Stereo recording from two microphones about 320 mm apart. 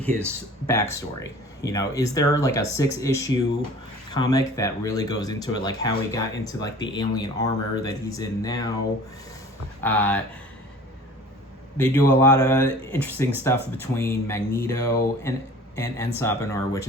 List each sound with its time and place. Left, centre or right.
0.7 s speech: centre
9.8 s speech: centre
11.8 s speech: centre